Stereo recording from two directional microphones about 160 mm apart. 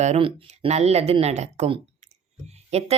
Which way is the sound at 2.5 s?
40° right (ahead or behind).